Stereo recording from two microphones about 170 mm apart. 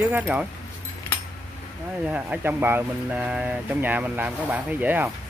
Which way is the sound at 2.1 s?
10° right (ahead or behind).